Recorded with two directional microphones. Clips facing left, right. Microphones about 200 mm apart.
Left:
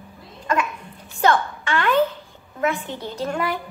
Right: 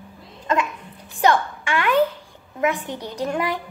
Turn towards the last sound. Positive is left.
turn(degrees=-15)  # may be behind; listen again after turning